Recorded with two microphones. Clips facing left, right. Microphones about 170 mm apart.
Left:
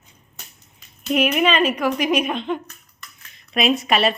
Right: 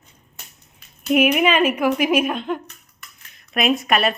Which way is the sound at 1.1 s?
10° right (ahead or behind).